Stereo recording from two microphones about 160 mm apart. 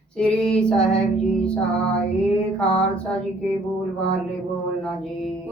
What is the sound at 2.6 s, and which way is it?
Mantra, 5° left (ahead or behind).